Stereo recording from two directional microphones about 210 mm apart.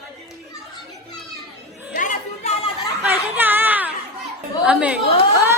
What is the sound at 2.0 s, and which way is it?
Chatter, 35° left (ahead or behind).